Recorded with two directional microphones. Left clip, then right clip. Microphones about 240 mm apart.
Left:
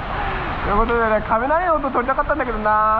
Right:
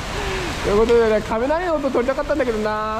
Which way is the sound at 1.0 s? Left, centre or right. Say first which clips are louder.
Even; right.